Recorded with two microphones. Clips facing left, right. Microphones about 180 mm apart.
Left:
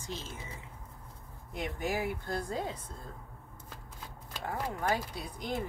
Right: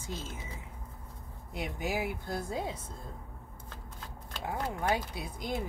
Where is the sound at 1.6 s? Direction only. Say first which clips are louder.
Even; 10° right (ahead or behind).